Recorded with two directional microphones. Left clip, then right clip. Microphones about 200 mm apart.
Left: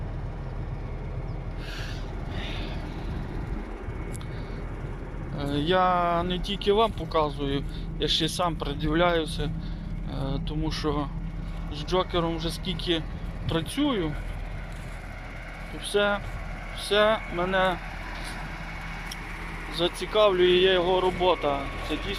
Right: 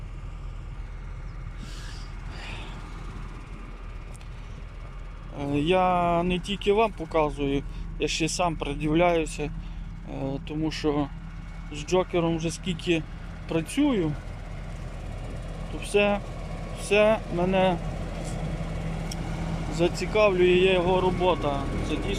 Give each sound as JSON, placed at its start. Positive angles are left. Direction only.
{"t": 5.4, "sound": "speech", "side_deg": -10}
{"t": 15.7, "sound": "speech", "side_deg": -15}
{"t": 18.1, "sound": "vehicle", "side_deg": -15}
{"t": 19.7, "sound": "speech", "side_deg": -10}